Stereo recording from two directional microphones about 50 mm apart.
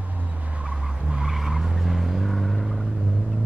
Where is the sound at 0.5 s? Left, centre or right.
Centre.